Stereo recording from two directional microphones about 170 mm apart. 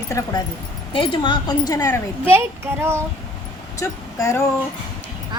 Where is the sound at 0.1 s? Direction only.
15° left (ahead or behind).